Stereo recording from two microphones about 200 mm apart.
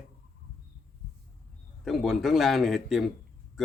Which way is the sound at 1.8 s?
Centre (ahead or behind).